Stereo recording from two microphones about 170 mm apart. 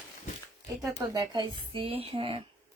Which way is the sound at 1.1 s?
25° right (ahead or behind).